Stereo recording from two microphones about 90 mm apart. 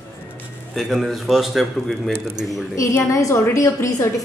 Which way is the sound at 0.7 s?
Centre (ahead or behind).